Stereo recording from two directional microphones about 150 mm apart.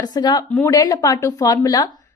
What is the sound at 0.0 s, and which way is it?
Speech, 30° left (ahead or behind).